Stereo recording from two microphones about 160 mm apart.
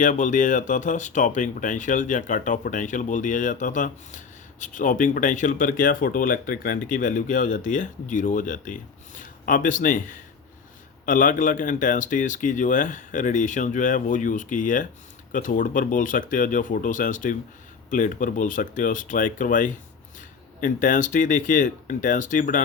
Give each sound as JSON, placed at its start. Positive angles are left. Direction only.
{"t": 0.0, "sound": "speech", "side_deg": 55}